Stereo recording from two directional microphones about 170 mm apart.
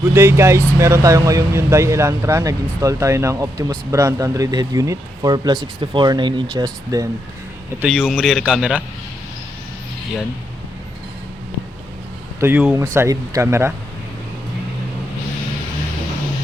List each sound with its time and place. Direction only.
0.1 s speech: 15° right (ahead or behind)
7.8 s a man's voice: centre (ahead or behind)
12.4 s speech: 10° right (ahead or behind)